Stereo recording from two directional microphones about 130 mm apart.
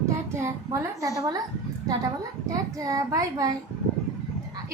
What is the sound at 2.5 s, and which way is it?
A child's voice, 25° right (ahead or behind).